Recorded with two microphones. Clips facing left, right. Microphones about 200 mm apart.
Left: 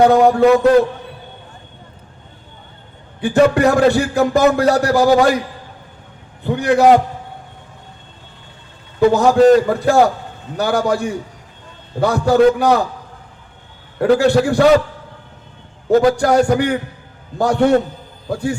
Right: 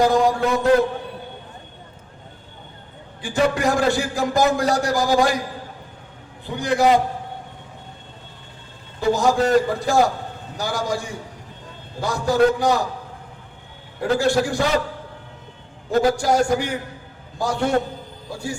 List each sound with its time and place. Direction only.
0.0 s a man's voice: 65° left (ahead or behind)
3.2 s a man's voice: 60° left (ahead or behind)
6.4 s a man's voice: 60° left (ahead or behind)
9.0 s a man's voice: 60° left (ahead or behind)
14.0 s a man's voice: 60° left (ahead or behind)
15.9 s a man's voice: 65° left (ahead or behind)